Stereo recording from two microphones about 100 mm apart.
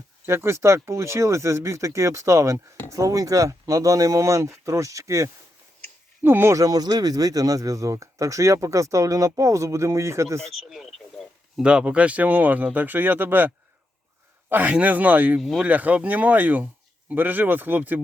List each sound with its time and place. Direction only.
0.3 s speech: 25° right (ahead or behind)
6.6 s speech: 40° right (ahead or behind)
10.4 s a sound: centre (ahead or behind)
11.6 s speech: 10° right (ahead or behind)
14.5 s speech: 15° right (ahead or behind)
15.4 s speech: centre (ahead or behind)
15.6 s speech: 15° right (ahead or behind)